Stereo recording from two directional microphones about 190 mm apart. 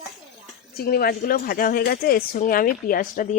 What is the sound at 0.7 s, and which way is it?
Speech, 50° left (ahead or behind).